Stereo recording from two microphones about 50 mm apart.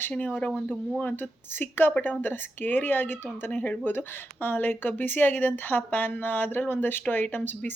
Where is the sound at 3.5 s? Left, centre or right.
Left.